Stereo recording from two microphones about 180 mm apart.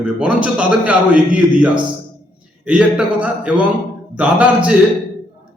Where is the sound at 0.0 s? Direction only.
5° right (ahead or behind).